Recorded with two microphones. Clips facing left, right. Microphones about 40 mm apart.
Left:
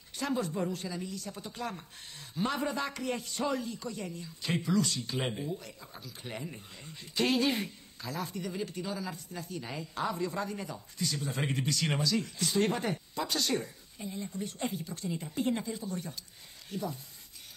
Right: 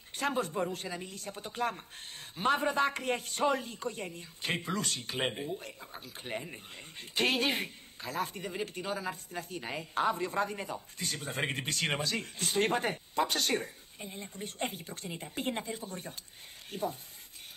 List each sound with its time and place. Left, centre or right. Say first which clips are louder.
0.1 s a man's voice: right 1 dB; right
5.3 s a man's voice: left 1 dB; right
7.0 s a man's voice: left 1 dB; right